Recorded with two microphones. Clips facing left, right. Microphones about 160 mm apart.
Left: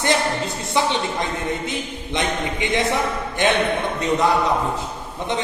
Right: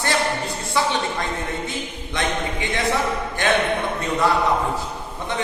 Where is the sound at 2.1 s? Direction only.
20° left (ahead or behind).